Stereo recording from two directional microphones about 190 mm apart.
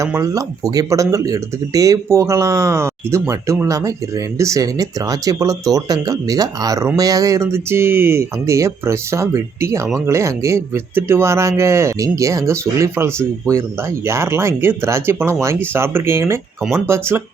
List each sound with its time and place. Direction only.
0.0 s speech: 15° right (ahead or behind)